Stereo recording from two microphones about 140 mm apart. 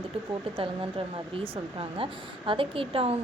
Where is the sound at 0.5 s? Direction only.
40° right (ahead or behind).